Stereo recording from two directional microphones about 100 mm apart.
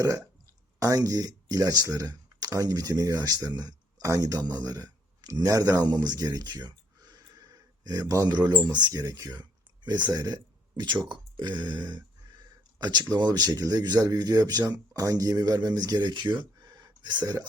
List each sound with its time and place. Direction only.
0.0 s speech: 35° right (ahead or behind)
8.4 s speech: 45° right (ahead or behind)
11.1 s burping: 50° right (ahead or behind)
12.8 s speech: 45° right (ahead or behind)